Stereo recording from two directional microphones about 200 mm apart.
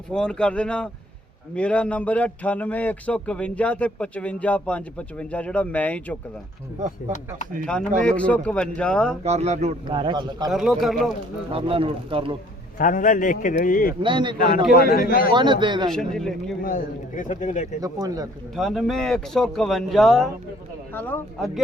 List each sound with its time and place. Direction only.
0.1 s speech: 5° left (ahead or behind)
7.6 s speech: 5° left (ahead or behind)
9.2 s a man's voice: 35° right (ahead or behind)
10.5 s speech: centre (ahead or behind)
11.5 s a man's voice: 25° right (ahead or behind)
12.8 s speech: 40° left (ahead or behind)
14.0 s a man's voice: 25° right (ahead or behind)
14.3 s a man's voice: 50° left (ahead or behind)
15.6 s a man's voice: 25° right (ahead or behind)
15.9 s speech: centre (ahead or behind)
16.6 s speech: 40° left (ahead or behind)
17.7 s speech: 15° right (ahead or behind)
18.5 s speech: centre (ahead or behind)